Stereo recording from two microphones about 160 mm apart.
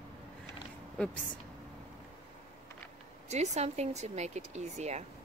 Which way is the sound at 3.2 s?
45° right (ahead or behind).